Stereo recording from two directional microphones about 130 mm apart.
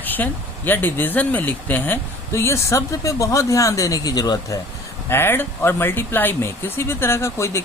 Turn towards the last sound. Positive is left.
turn(degrees=20)  # may be behind; listen again after turning